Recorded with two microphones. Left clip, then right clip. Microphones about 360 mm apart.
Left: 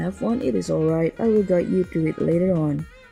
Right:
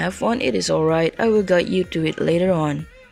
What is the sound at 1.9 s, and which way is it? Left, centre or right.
Speech, right.